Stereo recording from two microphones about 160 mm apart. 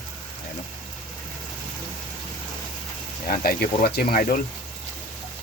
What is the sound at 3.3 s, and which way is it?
Speech, 70° left (ahead or behind).